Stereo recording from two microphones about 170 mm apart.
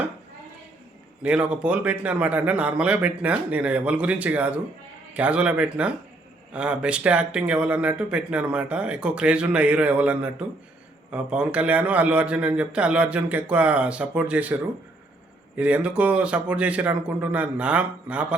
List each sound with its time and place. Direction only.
1.2 s speech: 5° right (ahead or behind)